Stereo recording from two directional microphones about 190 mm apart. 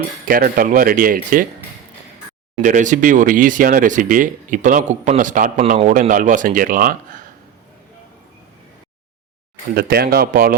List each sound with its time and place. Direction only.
0.3 s speech: 50° right (ahead or behind)
2.6 s speech: 40° right (ahead or behind)
9.7 s speech: 55° right (ahead or behind)